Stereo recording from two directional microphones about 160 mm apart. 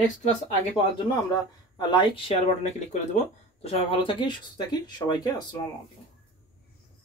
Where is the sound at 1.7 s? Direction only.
30° left (ahead or behind).